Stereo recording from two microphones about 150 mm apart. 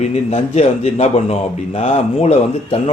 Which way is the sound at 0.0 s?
45° left (ahead or behind).